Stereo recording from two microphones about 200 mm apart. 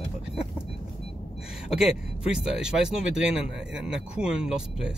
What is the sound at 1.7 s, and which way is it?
Speech, 5° right (ahead or behind).